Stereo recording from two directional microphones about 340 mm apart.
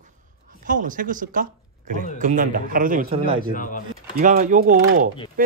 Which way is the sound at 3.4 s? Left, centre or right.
Left.